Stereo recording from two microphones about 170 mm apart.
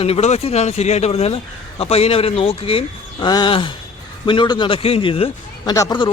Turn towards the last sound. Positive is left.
turn(degrees=20)  # may be behind; listen again after turning